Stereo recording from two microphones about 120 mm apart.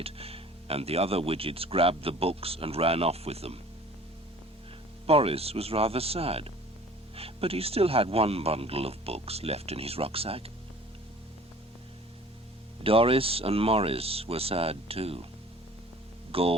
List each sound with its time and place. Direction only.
0.0 s speech: 55° right (ahead or behind)
5.0 s speech: 55° right (ahead or behind)
12.8 s speech: 50° right (ahead or behind)
16.3 s speech: 50° right (ahead or behind)